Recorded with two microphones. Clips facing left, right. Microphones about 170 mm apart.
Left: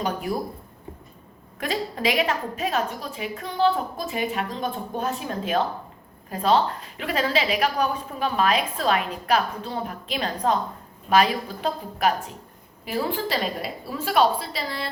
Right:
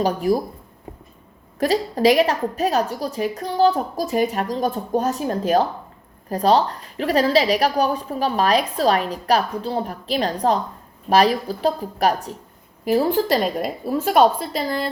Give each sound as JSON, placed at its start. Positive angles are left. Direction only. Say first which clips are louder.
{"t": 0.0, "sound": "a woman's voice", "louder": "right 8 dB", "side_deg": -35}
{"t": 1.5, "sound": "a woman's voice", "louder": "right 8 dB", "side_deg": -40}